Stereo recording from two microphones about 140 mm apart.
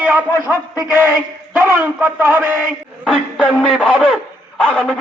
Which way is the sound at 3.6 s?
5° left (ahead or behind).